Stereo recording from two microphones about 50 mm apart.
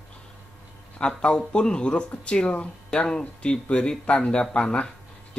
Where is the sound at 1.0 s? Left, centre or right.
Centre.